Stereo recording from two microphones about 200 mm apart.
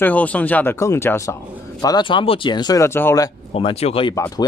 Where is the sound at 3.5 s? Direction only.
30° left (ahead or behind).